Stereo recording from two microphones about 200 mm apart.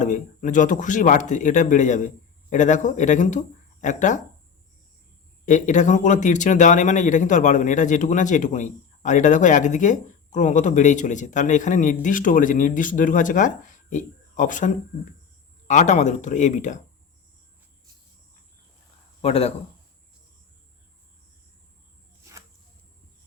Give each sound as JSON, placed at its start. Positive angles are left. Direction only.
{"t": 0.0, "sound": "speech", "side_deg": 40}
{"t": 5.5, "sound": "speech", "side_deg": 40}
{"t": 19.2, "sound": "speech", "side_deg": 30}